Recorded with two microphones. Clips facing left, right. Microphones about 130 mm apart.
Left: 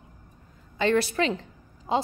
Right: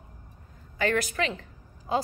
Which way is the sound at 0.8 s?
30° left (ahead or behind).